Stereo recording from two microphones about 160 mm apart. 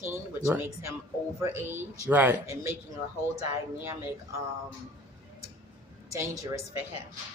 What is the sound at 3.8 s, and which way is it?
Speech, 15° right (ahead or behind).